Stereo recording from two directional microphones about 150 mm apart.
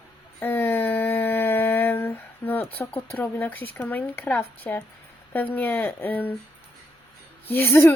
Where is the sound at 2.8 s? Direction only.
10° left (ahead or behind).